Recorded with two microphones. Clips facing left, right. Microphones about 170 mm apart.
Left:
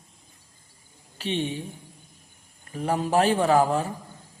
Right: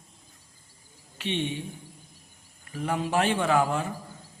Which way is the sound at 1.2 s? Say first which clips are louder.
Left 2 dB; 35° left (ahead or behind).